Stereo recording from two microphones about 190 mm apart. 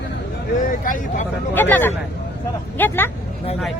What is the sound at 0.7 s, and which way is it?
Speech, 45° left (ahead or behind).